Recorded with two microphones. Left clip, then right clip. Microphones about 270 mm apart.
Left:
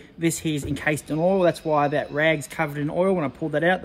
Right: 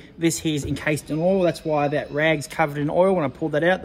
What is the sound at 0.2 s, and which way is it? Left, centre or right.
Speech, centre.